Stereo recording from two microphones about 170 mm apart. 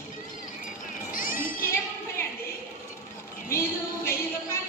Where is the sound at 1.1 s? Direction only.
55° left (ahead or behind).